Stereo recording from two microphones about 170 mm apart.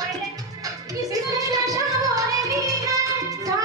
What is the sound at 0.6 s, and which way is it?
Music, 20° right (ahead or behind).